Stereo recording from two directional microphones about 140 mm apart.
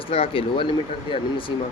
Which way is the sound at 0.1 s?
40° left (ahead or behind).